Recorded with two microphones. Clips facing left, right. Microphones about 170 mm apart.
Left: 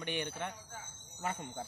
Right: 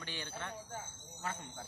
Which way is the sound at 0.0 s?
20° left (ahead or behind).